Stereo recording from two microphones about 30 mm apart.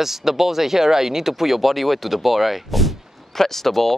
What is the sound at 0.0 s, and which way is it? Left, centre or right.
Speech, centre.